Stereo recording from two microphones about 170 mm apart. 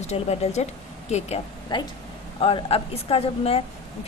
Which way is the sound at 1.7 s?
25° left (ahead or behind).